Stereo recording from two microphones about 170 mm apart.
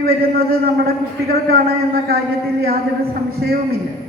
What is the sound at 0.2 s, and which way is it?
Speech, 65° right (ahead or behind).